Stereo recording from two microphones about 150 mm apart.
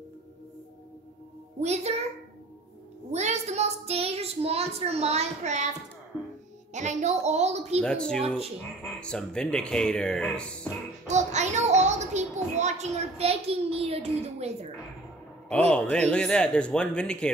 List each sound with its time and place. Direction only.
1.6 s a child's voice: 45° right (ahead or behind)
3.1 s a child's voice: 50° right (ahead or behind)
7.8 s speech: 5° left (ahead or behind)
11.1 s a child's voice: 50° right (ahead or behind)
15.7 s speech: 10° left (ahead or behind)